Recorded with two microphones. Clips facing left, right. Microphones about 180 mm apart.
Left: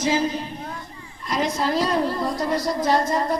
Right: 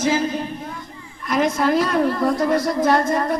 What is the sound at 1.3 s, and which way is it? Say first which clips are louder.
A woman's voice: right 5 dB; 55° right (ahead or behind).